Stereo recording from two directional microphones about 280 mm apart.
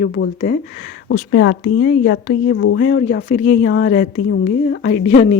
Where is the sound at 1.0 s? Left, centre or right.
Left.